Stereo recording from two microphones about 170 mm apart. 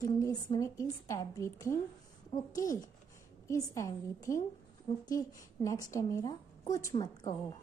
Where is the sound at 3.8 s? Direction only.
15° left (ahead or behind).